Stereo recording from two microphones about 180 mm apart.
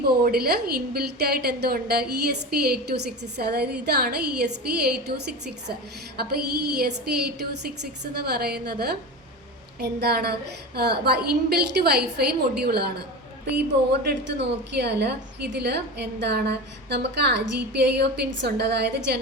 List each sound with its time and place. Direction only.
0.0 s a woman's voice: 60° right (ahead or behind)
6.1 s a woman's voice: 60° right (ahead or behind)
14.0 s a woman's voice: 65° right (ahead or behind)